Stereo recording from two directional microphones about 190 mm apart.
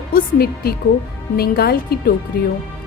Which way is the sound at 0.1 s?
55° left (ahead or behind).